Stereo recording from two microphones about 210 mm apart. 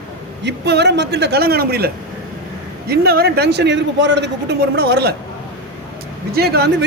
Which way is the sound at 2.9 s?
50° right (ahead or behind).